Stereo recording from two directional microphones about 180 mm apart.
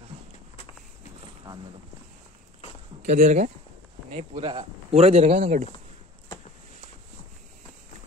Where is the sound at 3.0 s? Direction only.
40° right (ahead or behind).